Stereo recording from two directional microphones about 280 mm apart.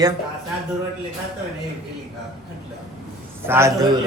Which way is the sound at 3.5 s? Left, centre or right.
Centre.